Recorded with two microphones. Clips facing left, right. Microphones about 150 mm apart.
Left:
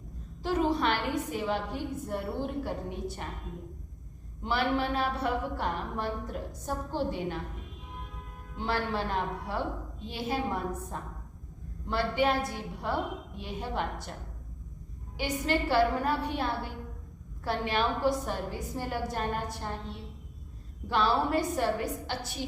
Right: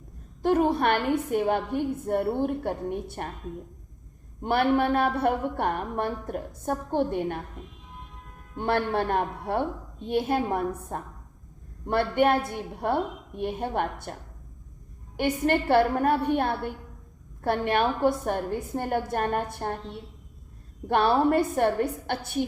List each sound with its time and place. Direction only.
0.4 s a woman's voice: 55° right (ahead or behind)
4.4 s a woman's voice: 55° right (ahead or behind)
8.5 s a woman's voice: 55° right (ahead or behind)
15.2 s a woman's voice: 55° right (ahead or behind)
20.8 s a woman's voice: 55° right (ahead or behind)